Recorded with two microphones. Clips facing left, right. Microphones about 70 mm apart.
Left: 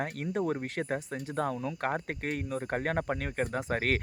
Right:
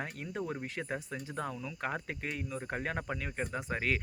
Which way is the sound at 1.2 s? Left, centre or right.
Left.